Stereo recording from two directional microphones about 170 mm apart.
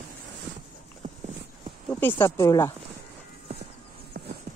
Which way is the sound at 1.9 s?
10° left (ahead or behind).